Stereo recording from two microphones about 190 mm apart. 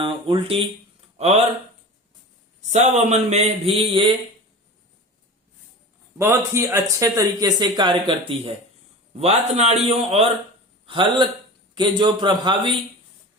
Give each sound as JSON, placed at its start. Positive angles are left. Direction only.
{"t": 0.0, "sound": "speech", "side_deg": -30}
{"t": 1.1, "sound": "a sound", "side_deg": -35}
{"t": 2.6, "sound": "a man's voice", "side_deg": -40}
{"t": 6.1, "sound": "a man's voice", "side_deg": -15}